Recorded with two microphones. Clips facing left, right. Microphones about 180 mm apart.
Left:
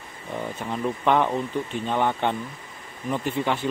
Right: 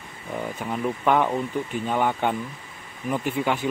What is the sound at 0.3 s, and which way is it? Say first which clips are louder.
Speech: right 1 dB; 5° right (ahead or behind).